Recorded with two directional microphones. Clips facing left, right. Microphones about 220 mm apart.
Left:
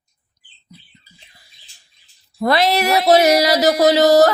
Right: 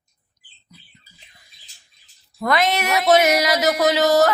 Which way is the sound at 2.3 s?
35° left (ahead or behind).